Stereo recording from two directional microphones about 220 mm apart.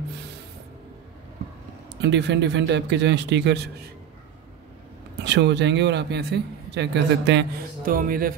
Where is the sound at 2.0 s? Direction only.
50° right (ahead or behind).